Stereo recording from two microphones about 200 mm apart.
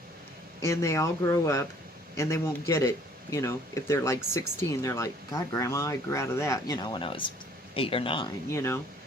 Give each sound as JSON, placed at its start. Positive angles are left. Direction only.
{"t": 0.6, "sound": "speech", "side_deg": 15}
{"t": 8.4, "sound": "speech", "side_deg": 15}